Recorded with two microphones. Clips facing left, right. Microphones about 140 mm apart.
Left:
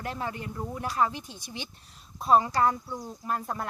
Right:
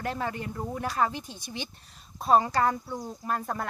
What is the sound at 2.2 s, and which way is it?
Speech, 40° right (ahead or behind).